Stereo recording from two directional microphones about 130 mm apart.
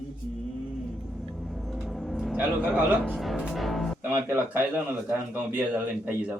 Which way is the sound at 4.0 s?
15° right (ahead or behind).